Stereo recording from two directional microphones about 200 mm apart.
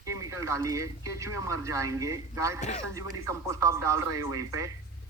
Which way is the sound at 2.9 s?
15° right (ahead or behind).